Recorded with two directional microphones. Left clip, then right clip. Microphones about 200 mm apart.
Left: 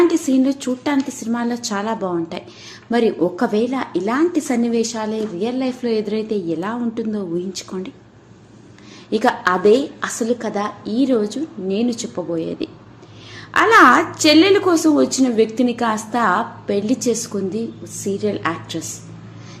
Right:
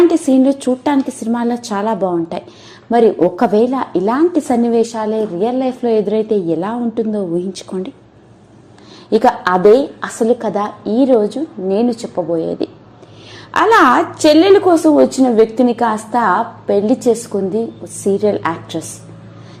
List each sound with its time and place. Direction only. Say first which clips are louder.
0.1 s a woman's voice: right 5 dB; 25° right (ahead or behind)
9.0 s a woman's voice: right 5 dB; 20° right (ahead or behind)